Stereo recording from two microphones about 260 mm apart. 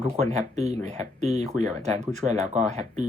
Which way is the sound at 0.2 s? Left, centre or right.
Right.